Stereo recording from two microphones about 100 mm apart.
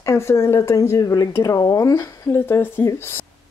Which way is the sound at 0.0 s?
25° left (ahead or behind).